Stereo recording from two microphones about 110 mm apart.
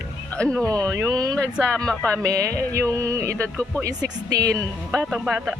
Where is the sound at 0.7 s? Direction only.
35° right (ahead or behind).